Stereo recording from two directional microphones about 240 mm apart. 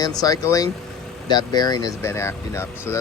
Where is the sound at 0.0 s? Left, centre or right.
Centre.